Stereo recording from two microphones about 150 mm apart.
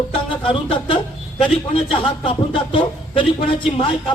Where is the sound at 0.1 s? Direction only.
35° left (ahead or behind).